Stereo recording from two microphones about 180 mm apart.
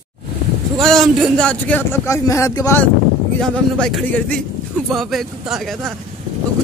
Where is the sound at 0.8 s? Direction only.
Centre (ahead or behind).